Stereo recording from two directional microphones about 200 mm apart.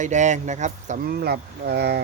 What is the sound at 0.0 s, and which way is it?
Speech, 35° right (ahead or behind).